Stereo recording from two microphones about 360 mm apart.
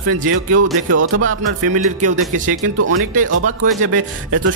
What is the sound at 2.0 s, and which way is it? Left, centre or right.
Speech, right.